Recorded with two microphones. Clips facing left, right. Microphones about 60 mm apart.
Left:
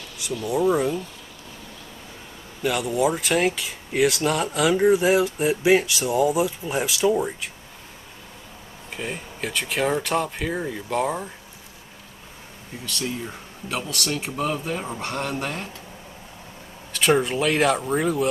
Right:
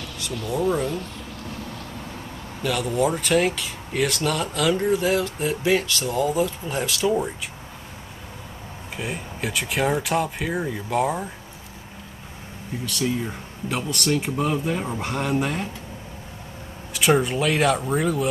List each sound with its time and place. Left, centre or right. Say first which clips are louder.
0.5 s speech: left 2 dB; left
0.9 s a sound: even; right
2.6 s speech: left 1 dB; centre
4.2 s speech: left 2 dB; centre
8.9 s speech: right 1 dB; centre
12.8 s speech: right 4 dB; centre
16.9 s speech: even; centre